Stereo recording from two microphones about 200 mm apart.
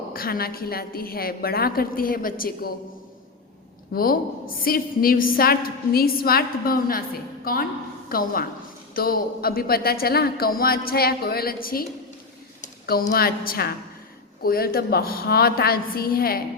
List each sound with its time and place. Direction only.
0.1 s a woman's voice: 50° left (ahead or behind)
3.9 s a woman's voice: 45° left (ahead or behind)